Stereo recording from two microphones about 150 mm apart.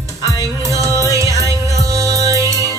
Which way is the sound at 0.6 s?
20° right (ahead or behind).